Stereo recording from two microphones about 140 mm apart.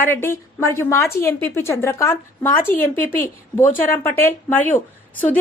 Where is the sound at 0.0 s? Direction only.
15° left (ahead or behind).